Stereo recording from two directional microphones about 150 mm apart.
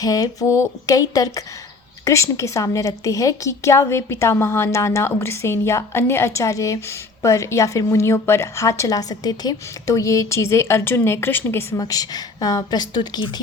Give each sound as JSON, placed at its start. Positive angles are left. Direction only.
{"t": 0.0, "sound": "a woman's voice", "side_deg": 25}
{"t": 11.8, "sound": "a woman's voice", "side_deg": 25}